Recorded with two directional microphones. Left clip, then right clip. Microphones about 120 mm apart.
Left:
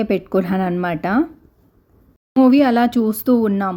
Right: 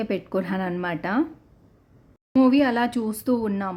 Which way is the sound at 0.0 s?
30° left (ahead or behind).